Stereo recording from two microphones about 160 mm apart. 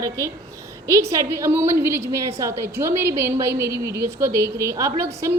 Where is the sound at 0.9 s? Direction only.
20° right (ahead or behind).